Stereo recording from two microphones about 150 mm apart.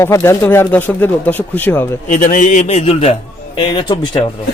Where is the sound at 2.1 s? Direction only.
60° left (ahead or behind); by 3.1 s 40° left (ahead or behind).